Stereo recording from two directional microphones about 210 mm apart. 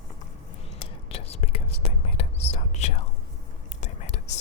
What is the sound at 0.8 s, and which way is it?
Whispering, 30° left (ahead or behind).